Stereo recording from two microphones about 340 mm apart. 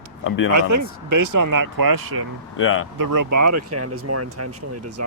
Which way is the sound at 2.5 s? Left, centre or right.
Left.